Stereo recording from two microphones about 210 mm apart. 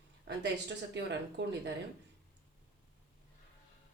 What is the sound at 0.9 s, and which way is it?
Speech, 55° right (ahead or behind).